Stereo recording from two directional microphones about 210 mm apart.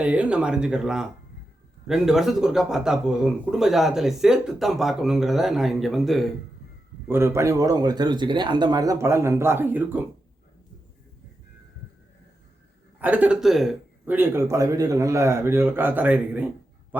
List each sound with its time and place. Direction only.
0.0 s speech: 5° right (ahead or behind)
7.1 s a man's voice: 15° right (ahead or behind)
13.0 s a man's voice: 5° right (ahead or behind)